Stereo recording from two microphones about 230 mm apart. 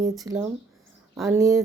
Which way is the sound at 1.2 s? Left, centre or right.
Centre.